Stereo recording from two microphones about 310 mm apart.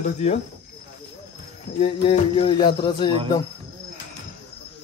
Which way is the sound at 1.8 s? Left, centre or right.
Centre.